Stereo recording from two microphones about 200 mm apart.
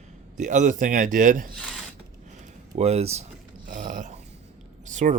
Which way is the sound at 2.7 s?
30° right (ahead or behind).